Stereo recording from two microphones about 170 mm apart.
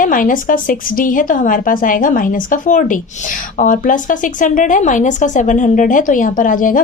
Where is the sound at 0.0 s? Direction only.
50° left (ahead or behind).